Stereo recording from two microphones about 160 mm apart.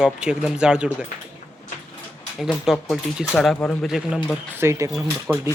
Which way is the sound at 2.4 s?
Centre (ahead or behind).